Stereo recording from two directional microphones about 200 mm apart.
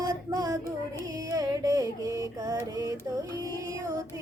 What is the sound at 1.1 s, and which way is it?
Music, 20° right (ahead or behind).